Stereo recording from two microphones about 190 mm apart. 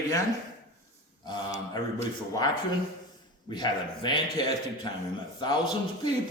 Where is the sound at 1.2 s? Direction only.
20° left (ahead or behind).